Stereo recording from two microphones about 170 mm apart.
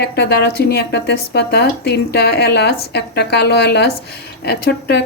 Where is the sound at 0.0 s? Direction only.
75° left (ahead or behind).